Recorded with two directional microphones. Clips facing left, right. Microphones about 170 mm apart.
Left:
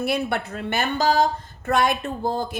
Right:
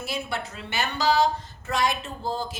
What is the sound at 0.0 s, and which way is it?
A woman's voice, 60° left (ahead or behind).